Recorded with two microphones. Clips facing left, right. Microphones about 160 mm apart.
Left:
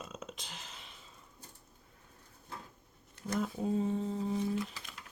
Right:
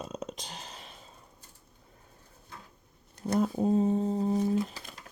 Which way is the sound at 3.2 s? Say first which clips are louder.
Right 7 dB; 35° right (ahead or behind).